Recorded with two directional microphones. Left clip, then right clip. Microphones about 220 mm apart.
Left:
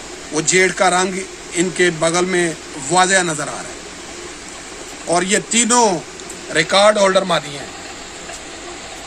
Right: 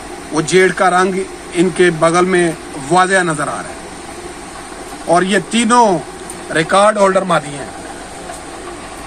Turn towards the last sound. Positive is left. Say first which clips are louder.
# right 2 dB
turn(degrees=10)  # may be behind; listen again after turning